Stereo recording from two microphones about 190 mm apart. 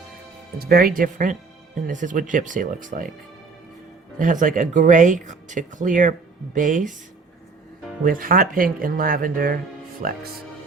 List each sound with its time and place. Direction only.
0.6 s speech: 50° right (ahead or behind)
4.2 s speech: 45° right (ahead or behind)
8.0 s speech: 50° right (ahead or behind)